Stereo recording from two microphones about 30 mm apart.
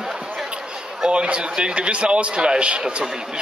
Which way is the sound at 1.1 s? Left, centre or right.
Right.